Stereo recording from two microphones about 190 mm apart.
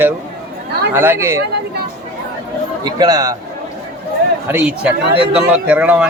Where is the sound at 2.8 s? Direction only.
20° right (ahead or behind).